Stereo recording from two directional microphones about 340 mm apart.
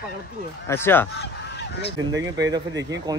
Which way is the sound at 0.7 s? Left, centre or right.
Centre.